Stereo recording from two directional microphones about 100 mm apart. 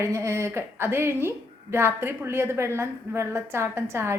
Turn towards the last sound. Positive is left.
turn(degrees=-25)  # may be behind; listen again after turning